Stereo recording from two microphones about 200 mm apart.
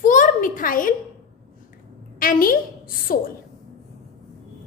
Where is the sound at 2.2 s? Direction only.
45° left (ahead or behind).